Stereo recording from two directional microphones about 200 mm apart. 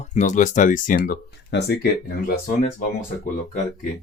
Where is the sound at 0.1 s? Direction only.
40° left (ahead or behind); by 2.3 s 55° left (ahead or behind).